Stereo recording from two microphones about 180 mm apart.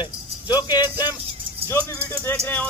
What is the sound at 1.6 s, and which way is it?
Speech, 15° left (ahead or behind).